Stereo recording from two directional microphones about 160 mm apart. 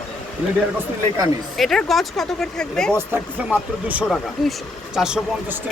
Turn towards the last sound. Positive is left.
turn(degrees=-5)  # may be behind; listen again after turning